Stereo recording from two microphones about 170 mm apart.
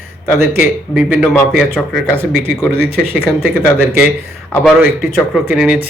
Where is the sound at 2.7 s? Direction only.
75° right (ahead or behind).